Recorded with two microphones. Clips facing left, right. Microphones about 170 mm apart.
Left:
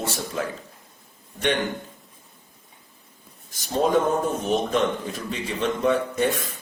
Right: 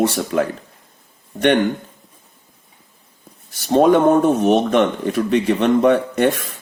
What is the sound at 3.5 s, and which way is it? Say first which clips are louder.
Speech: right 8 dB; 70° right (ahead or behind).